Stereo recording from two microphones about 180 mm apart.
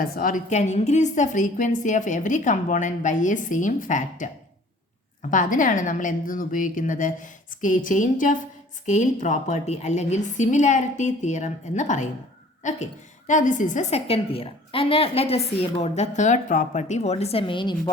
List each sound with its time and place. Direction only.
0.0 s a woman's voice: 50° left (ahead or behind)
5.3 s a woman's voice: 45° left (ahead or behind); by 17.9 s 25° left (ahead or behind)